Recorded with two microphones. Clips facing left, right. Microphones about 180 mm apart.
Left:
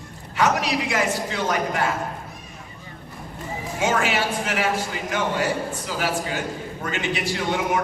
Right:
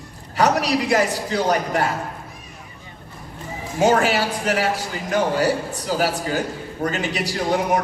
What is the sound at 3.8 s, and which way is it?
A man's voice, 35° right (ahead or behind).